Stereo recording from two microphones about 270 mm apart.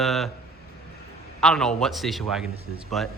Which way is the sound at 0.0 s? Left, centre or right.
Centre.